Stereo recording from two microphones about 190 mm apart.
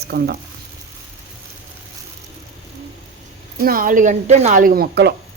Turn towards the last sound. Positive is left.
turn(degrees=-55)  # may be behind; listen again after turning